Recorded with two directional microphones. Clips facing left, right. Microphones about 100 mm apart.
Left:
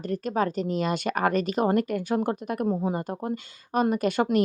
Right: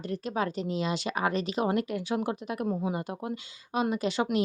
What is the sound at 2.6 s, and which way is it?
Speech, 30° left (ahead or behind).